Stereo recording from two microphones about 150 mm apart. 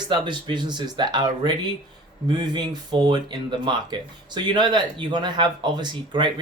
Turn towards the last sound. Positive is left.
turn(degrees=-30)  # may be behind; listen again after turning